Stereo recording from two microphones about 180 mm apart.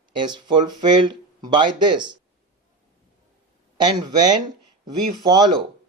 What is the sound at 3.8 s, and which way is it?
Speech, 25° right (ahead or behind).